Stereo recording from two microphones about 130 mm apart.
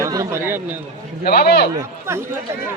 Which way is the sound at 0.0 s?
25° right (ahead or behind).